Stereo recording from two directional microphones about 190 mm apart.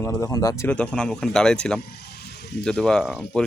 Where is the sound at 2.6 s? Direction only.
5° left (ahead or behind).